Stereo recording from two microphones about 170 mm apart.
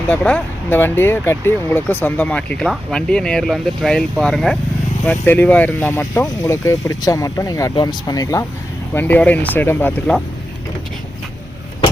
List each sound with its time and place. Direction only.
0.1 s speech: 5° left (ahead or behind)